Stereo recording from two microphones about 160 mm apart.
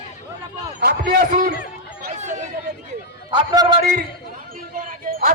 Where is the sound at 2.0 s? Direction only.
45° right (ahead or behind).